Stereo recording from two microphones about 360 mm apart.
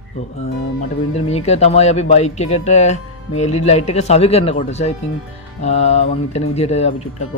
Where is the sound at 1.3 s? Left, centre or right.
Centre.